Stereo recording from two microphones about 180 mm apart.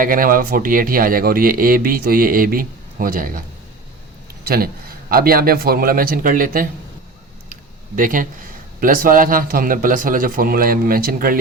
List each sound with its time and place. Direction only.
0.0 s speech: 50° right (ahead or behind)
4.4 s a man's voice: 55° right (ahead or behind)
7.5 s a sound: 50° right (ahead or behind)
8.8 s speech: 50° right (ahead or behind)